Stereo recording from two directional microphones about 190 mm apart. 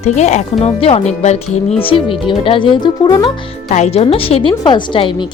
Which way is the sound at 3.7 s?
35° left (ahead or behind).